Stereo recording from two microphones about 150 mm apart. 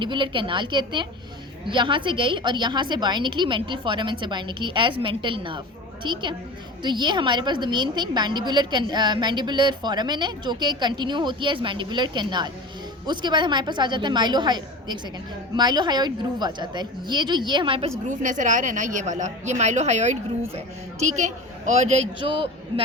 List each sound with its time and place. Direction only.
0.0 s a woman's voice: 30° right (ahead or behind)
18.0 s a woman's voice: 55° right (ahead or behind)
21.2 s a woman's voice: 50° right (ahead or behind)
22.2 s a woman's voice: 35° right (ahead or behind)